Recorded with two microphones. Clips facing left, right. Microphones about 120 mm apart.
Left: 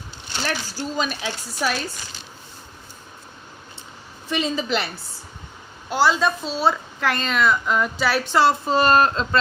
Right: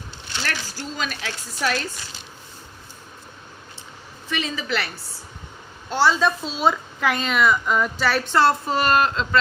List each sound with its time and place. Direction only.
0.4 s speech: 15° left (ahead or behind)
1.5 s speech: 10° left (ahead or behind)
4.3 s a woman's voice: 25° left (ahead or behind)
5.9 s a woman's voice: 5° left (ahead or behind)
6.6 s a woman's voice: 10° right (ahead or behind); by 8.5 s 10° left (ahead or behind)
8.7 s speech: 30° left (ahead or behind)